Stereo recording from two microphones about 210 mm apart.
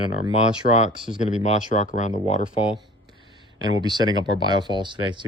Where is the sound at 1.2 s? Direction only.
35° left (ahead or behind).